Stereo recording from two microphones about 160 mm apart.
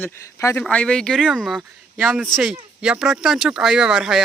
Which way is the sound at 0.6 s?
5° left (ahead or behind).